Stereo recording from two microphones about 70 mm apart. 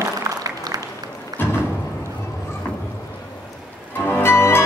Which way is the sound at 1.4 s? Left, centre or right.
Left.